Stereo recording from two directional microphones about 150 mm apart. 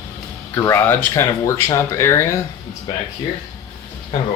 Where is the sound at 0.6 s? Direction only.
15° left (ahead or behind).